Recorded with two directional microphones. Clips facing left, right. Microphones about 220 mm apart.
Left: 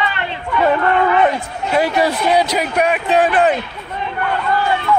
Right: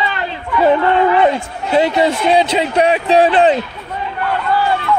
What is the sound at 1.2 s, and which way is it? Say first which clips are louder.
A man's voice: right 2 dB; 25° right (ahead or behind).